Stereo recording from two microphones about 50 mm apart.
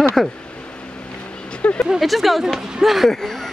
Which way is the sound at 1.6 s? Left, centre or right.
Left.